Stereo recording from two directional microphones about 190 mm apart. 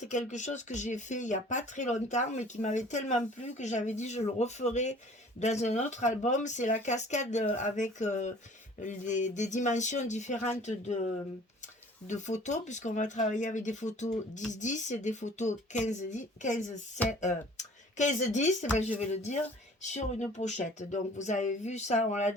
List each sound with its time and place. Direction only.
0.0 s speech: 40° left (ahead or behind)
12.0 s speech: 40° left (ahead or behind)